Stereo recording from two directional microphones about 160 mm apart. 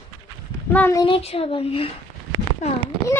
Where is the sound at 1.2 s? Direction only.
40° left (ahead or behind).